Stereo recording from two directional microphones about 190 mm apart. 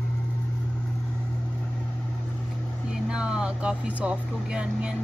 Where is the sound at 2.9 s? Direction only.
5° right (ahead or behind).